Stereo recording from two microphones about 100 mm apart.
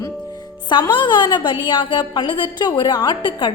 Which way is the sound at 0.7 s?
50° left (ahead or behind).